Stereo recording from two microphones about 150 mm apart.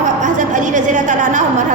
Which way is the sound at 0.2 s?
60° right (ahead or behind).